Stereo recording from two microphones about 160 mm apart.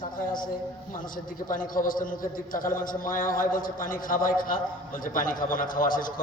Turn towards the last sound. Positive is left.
turn(degrees=60)  # may be behind; listen again after turning